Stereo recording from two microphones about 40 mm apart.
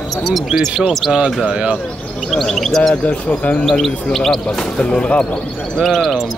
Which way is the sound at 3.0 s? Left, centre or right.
Left.